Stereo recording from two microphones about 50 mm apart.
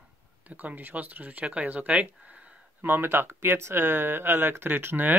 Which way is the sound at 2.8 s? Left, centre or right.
Right.